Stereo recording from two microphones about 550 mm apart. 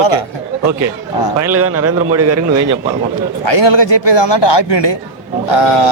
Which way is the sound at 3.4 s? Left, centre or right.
Left.